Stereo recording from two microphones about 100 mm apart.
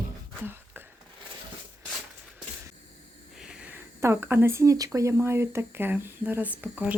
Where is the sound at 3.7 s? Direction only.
25° right (ahead or behind).